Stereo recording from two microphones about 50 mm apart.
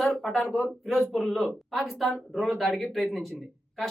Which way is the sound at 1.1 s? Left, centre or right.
Centre.